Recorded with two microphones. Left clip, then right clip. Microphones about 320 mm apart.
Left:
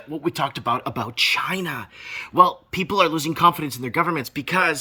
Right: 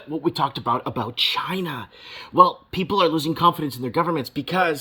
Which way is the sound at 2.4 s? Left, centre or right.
Centre.